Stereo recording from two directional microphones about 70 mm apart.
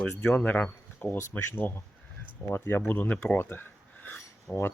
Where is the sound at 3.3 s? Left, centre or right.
Left.